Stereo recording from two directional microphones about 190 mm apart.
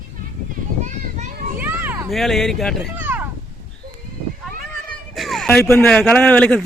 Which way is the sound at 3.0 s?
10° right (ahead or behind).